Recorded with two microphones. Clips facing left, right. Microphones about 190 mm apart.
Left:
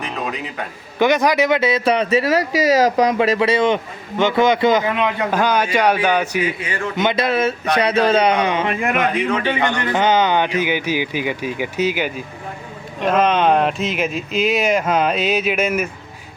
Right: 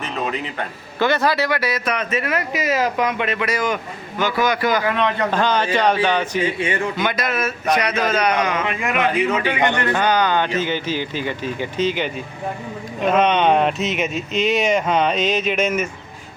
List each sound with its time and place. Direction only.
0.9 s speech: 15° left (ahead or behind)
6.4 s speech: 25° right (ahead or behind)
6.9 s speech: 20° left (ahead or behind)
8.6 s speech: 45° left (ahead or behind)
9.0 s speech: centre (ahead or behind)
9.6 s speech: 20° right (ahead or behind)
9.8 s speech: 20° left (ahead or behind)